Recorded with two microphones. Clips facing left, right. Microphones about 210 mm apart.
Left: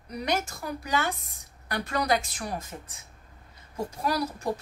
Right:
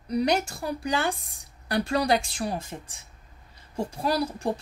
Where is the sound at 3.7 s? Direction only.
30° right (ahead or behind).